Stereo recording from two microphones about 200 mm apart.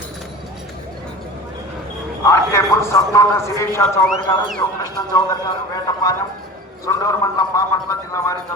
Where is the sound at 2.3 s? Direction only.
15° left (ahead or behind).